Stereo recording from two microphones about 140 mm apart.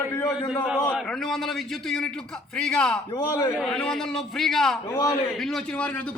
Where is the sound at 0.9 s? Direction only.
Centre (ahead or behind).